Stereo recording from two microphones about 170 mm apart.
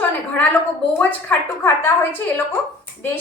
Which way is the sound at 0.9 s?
10° left (ahead or behind).